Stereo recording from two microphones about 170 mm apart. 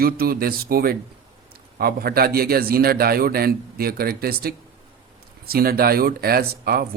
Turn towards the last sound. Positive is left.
turn(degrees=-60)  # may be behind; listen again after turning